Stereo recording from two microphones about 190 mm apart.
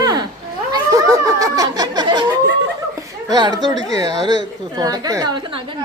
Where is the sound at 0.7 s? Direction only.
15° right (ahead or behind).